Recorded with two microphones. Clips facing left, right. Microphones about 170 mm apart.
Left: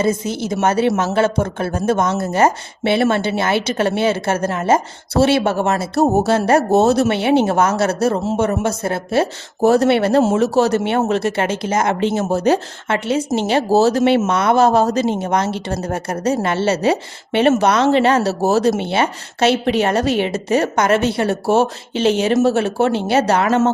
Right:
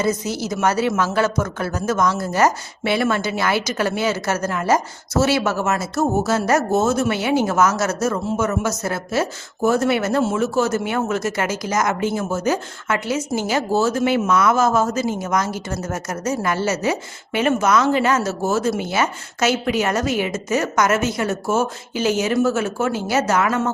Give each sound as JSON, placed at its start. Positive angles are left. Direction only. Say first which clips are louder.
{"t": 0.0, "sound": "a woman's voice", "louder": "left 3 dB", "side_deg": 25}